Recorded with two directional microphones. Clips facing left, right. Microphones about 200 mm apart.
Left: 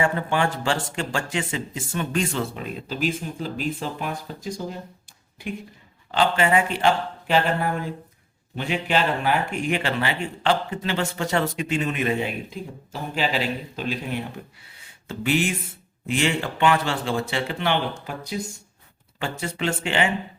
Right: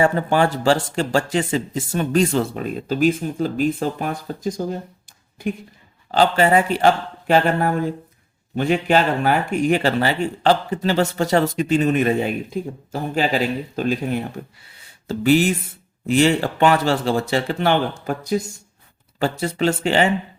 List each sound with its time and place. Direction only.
0.0 s speech: 40° right (ahead or behind)